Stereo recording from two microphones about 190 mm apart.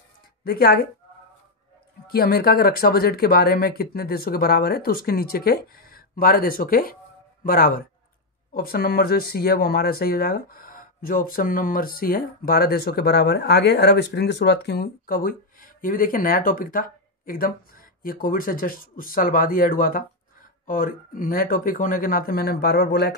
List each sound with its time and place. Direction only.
0.4 s speech: 55° left (ahead or behind)
2.0 s speech: 55° left (ahead or behind)